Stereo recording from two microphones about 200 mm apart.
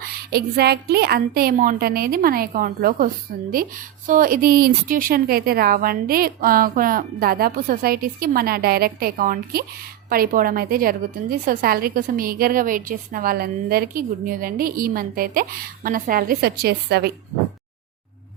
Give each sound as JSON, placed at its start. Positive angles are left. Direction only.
{"t": 0.0, "sound": "a woman's voice", "side_deg": -50}